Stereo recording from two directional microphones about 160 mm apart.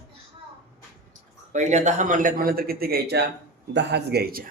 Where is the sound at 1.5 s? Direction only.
50° right (ahead or behind); by 4.5 s 70° right (ahead or behind).